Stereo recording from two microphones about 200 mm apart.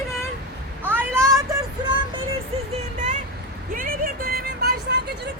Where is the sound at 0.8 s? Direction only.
10° right (ahead or behind).